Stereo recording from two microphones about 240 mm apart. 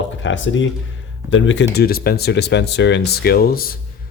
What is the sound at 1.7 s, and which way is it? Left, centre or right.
Speech, left.